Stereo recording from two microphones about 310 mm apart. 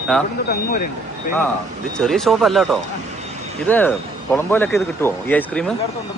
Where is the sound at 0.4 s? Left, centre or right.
Left.